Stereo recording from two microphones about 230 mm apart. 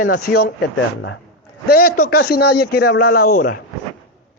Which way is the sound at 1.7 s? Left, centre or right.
Left.